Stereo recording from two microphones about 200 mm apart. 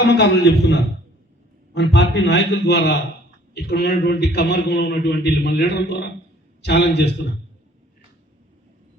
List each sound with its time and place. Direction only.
0.0 s a man's voice: 55° left (ahead or behind)